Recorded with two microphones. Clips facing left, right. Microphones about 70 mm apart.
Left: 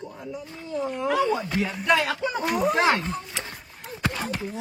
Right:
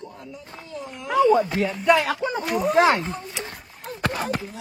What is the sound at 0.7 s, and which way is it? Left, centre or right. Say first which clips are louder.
Speech: left 8 dB; left.